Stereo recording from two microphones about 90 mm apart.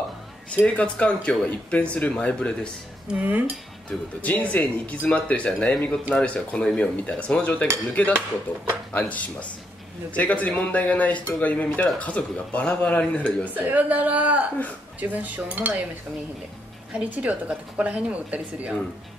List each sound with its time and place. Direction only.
0.7 s speech: 15° left (ahead or behind)
3.1 s speech: 20° right (ahead or behind)
4.2 s speech: 15° left (ahead or behind)
13.6 s speech: 20° right (ahead or behind)
15.0 s dishes: 20° right (ahead or behind)
17.1 s speech: 15° right (ahead or behind)